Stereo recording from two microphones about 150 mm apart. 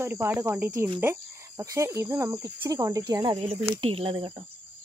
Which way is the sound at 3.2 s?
35° right (ahead or behind).